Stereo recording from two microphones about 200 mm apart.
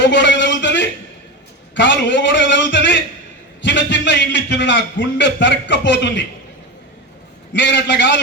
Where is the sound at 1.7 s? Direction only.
65° left (ahead or behind).